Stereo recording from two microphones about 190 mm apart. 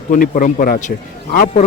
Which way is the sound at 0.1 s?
45° left (ahead or behind).